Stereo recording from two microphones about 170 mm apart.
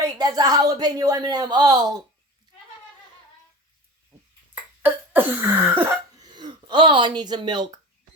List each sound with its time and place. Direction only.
0.0 s speech: 20° right (ahead or behind)
4.8 s cough: 10° right (ahead or behind)
6.2 s speech: 25° right (ahead or behind)